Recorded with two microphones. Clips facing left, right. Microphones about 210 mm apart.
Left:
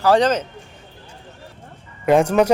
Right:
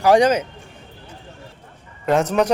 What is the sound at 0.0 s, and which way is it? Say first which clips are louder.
Speech: right 1 dB; 15° right (ahead or behind).